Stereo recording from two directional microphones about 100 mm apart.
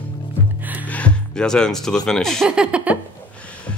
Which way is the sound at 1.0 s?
10° left (ahead or behind).